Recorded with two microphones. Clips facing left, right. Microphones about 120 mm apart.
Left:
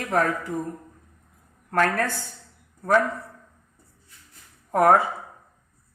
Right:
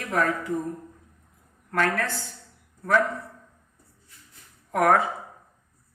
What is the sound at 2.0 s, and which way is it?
Speech, 45° left (ahead or behind).